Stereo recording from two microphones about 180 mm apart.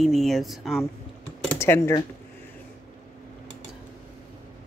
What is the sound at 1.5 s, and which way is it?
Speech, 15° left (ahead or behind).